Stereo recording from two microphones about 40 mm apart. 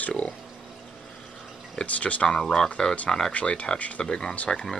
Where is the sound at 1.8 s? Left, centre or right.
Left.